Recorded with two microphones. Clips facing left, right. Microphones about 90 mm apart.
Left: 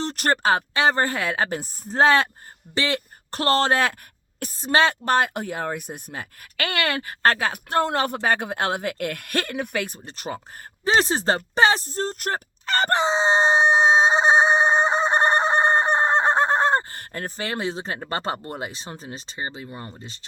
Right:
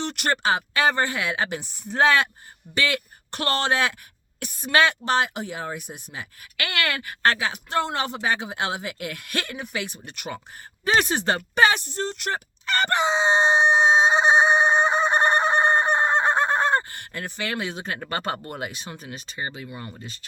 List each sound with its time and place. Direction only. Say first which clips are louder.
0.0 s speech: left 2 dB; 35° left (ahead or behind)
0.7 s speech: left 1 dB; 30° left (ahead or behind)
4.6 s speech: left 1 dB; 30° left (ahead or behind)
5.0 s speech: left 2 dB; 45° left (ahead or behind)
6.6 s speech: left 2 dB; 30° left (ahead or behind)